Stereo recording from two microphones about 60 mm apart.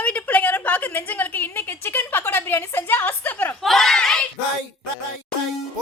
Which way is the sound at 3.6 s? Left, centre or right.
Centre.